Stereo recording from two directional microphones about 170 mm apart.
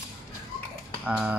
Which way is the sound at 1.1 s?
5° right (ahead or behind).